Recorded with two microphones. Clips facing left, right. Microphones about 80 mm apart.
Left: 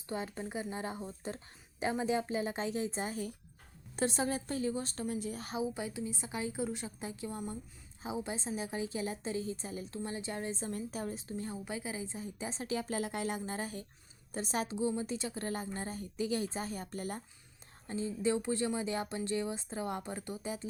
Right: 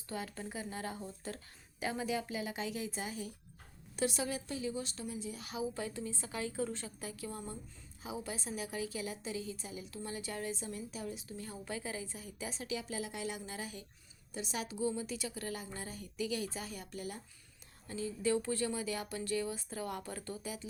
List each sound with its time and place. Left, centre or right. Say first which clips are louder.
0.1 s a woman's voice: left 3 dB; left
5.7 s a woman's voice: left 2 dB; centre; by 10.0 s left
10.0 s a woman's voice: left 1 dB; left
11.5 s a woman's voice: left 2 dB; centre; by 14.8 s left
14.8 s a woman's voice: left 2 dB; left
17.8 s speech: left 2 dB; left